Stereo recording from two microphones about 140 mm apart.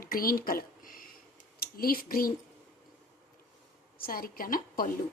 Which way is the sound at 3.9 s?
90° left.